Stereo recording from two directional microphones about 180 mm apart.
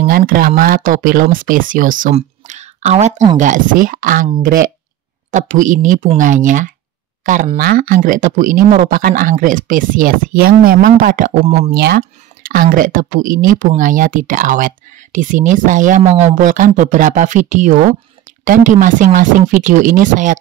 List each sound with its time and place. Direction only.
0.3 s speech: 55° right (ahead or behind)
11.4 s speech: 35° right (ahead or behind)
11.7 s speech: 60° right (ahead or behind)